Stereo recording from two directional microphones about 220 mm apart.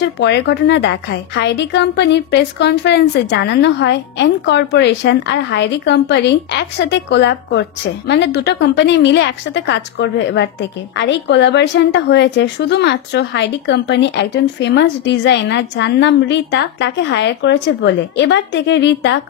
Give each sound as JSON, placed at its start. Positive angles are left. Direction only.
{"t": 0.0, "sound": "a woman's voice", "side_deg": 50}